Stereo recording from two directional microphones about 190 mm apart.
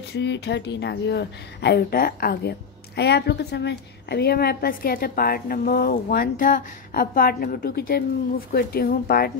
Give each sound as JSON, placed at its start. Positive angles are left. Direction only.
{"t": 0.1, "sound": "a woman's voice", "side_deg": 65}